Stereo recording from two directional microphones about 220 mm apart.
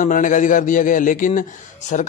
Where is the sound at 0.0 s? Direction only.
35° left (ahead or behind).